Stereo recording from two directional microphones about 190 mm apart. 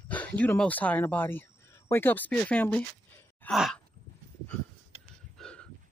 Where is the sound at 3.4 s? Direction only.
Centre (ahead or behind).